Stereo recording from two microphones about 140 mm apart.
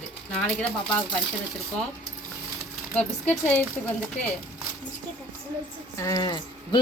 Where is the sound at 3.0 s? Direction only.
10° left (ahead or behind).